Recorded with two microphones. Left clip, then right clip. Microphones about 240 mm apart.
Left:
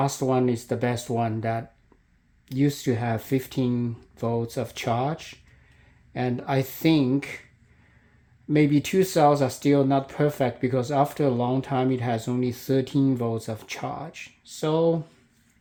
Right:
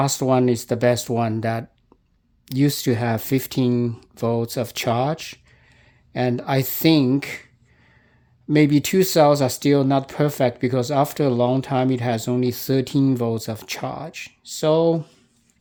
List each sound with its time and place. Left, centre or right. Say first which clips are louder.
0.0 s speech: right 5 dB; right
8.4 s speech: right 4 dB; right